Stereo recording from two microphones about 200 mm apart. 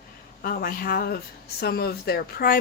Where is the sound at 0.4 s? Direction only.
45° left (ahead or behind).